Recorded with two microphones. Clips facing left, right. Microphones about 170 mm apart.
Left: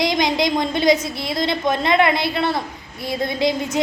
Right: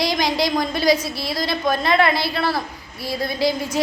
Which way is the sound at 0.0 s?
20° left (ahead or behind).